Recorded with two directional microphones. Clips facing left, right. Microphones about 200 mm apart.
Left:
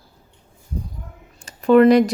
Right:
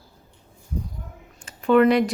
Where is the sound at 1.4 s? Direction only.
40° left (ahead or behind).